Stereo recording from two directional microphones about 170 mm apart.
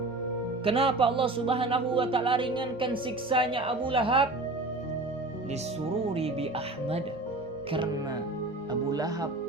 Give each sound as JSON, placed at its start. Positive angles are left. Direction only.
{"t": 0.6, "sound": "speech", "side_deg": -35}
{"t": 6.1, "sound": "speech", "side_deg": -35}
{"t": 8.9, "sound": "speech", "side_deg": -20}